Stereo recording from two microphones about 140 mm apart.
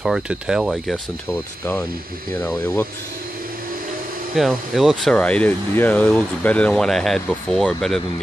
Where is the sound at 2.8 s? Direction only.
90° right.